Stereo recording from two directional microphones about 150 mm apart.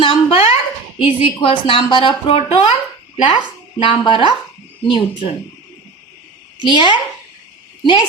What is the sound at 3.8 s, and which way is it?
Speech, 30° left (ahead or behind).